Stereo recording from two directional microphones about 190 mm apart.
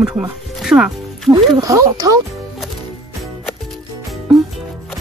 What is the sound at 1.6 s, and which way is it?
Speech, 20° right (ahead or behind).